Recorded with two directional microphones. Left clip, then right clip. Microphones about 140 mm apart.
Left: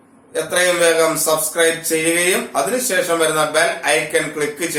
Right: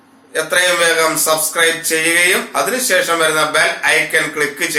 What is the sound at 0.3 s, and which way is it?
Speech, 15° left (ahead or behind).